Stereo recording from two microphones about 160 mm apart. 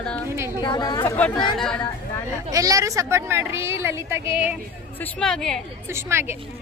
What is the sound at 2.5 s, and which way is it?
Speech, 20° right (ahead or behind).